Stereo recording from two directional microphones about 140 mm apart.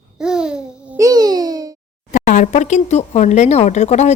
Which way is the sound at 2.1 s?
60° left (ahead or behind).